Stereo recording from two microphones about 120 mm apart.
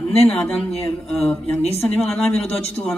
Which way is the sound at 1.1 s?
Centre (ahead or behind).